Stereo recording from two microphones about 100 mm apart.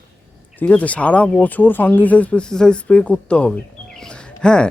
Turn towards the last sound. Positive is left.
turn(degrees=10)  # may be behind; listen again after turning